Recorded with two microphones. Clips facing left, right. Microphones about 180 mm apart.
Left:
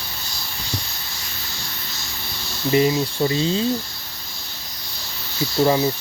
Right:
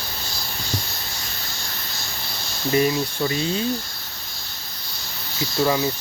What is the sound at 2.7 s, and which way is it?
Speech, 20° left (ahead or behind).